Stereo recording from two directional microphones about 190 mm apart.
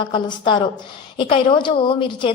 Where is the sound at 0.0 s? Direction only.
25° left (ahead or behind).